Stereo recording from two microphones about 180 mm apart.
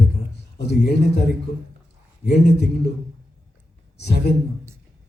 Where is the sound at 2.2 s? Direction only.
60° left (ahead or behind).